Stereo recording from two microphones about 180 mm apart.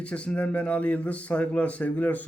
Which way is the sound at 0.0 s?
5° left (ahead or behind).